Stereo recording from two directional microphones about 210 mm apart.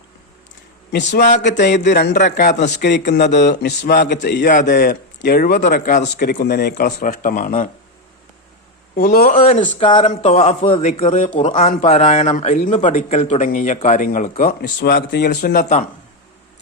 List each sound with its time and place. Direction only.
0.9 s speech: 50° left (ahead or behind)
1.5 s speech: 55° left (ahead or behind)
2.1 s a man's voice: 40° left (ahead or behind)
2.6 s speech: 55° left (ahead or behind)
9.0 s a man's voice: 45° left (ahead or behind)
14.8 s speech: 50° left (ahead or behind)